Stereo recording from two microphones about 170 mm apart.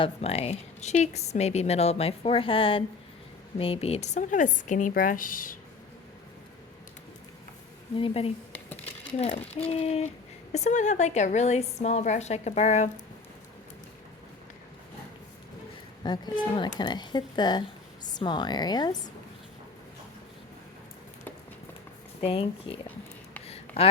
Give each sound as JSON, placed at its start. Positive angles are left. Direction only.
{"t": 0.0, "sound": "a woman's voice", "side_deg": 35}
{"t": 7.9, "sound": "a woman's voice", "side_deg": 35}
{"t": 16.0, "sound": "speech", "side_deg": 25}
{"t": 22.2, "sound": "a woman's voice", "side_deg": 35}
{"t": 23.5, "sound": "a sound", "side_deg": 35}